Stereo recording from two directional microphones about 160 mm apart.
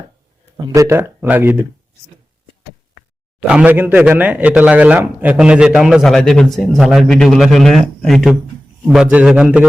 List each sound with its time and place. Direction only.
0.5 s speech: 20° right (ahead or behind)
3.4 s speech: 5° right (ahead or behind)